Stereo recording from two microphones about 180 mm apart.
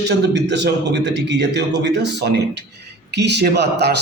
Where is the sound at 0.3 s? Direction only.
70° right (ahead or behind).